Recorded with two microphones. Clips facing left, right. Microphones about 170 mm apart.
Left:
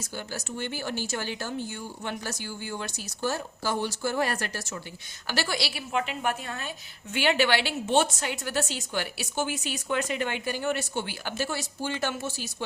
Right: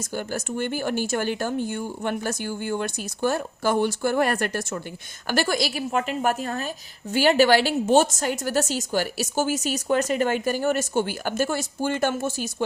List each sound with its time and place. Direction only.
0.3 s a woman's voice: 50° right (ahead or behind)